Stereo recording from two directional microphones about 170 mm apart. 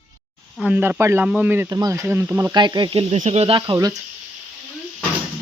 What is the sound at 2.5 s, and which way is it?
Sizzle, 25° right (ahead or behind).